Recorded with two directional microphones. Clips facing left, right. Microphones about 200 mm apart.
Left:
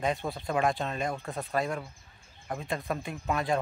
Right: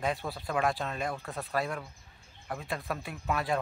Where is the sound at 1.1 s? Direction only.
15° left (ahead or behind).